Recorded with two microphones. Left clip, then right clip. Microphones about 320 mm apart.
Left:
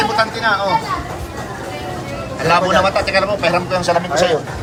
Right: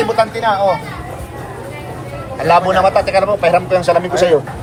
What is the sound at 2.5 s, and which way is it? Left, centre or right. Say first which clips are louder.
A man's voice: right 3 dB; centre.